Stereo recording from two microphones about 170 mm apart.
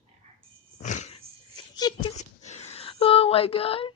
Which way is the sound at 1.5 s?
25° left (ahead or behind).